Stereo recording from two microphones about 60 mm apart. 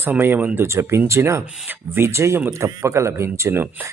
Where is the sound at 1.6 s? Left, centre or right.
Right.